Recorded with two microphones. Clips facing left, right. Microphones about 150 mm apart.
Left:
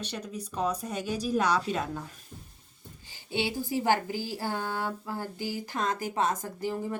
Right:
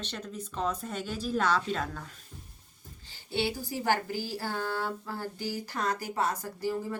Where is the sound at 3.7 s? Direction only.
15° left (ahead or behind).